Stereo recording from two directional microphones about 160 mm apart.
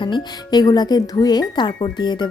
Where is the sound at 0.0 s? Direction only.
25° left (ahead or behind).